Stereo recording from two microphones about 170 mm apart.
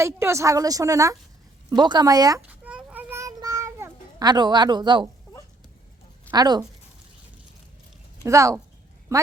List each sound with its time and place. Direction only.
0.0 s a woman's voice: 15° right (ahead or behind)
2.5 s child singing: 10° right (ahead or behind); by 5.0 s 25° right (ahead or behind)
6.3 s a woman's voice: 25° right (ahead or behind)
8.2 s a woman's voice: 20° right (ahead or behind)